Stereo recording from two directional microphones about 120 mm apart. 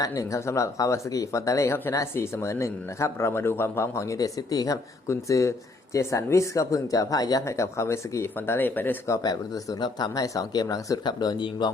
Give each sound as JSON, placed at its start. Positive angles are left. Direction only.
{"t": 0.0, "sound": "speech", "side_deg": 30}